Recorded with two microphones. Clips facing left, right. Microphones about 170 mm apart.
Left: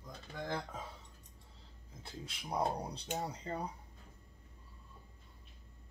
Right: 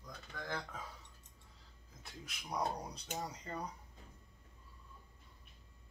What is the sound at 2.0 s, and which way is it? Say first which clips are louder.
Speech: left 4 dB; 30° left (ahead or behind).